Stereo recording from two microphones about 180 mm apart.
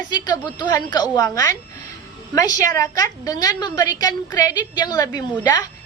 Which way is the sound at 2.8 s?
20° left (ahead or behind).